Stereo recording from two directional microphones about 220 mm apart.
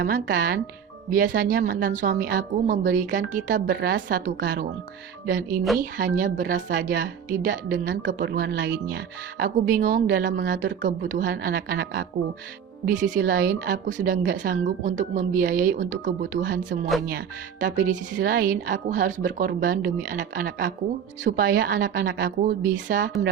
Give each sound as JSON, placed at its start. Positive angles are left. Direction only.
{"t": 0.0, "sound": "a woman's voice", "side_deg": -40}
{"t": 3.8, "sound": "a woman's voice", "side_deg": -50}
{"t": 9.4, "sound": "a woman's voice", "side_deg": -40}
{"t": 12.8, "sound": "a woman's voice", "side_deg": -35}